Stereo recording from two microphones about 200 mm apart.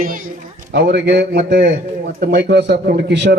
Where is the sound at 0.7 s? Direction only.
55° right (ahead or behind).